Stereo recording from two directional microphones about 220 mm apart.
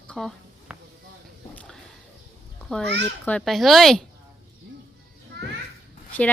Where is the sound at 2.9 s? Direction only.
50° right (ahead or behind).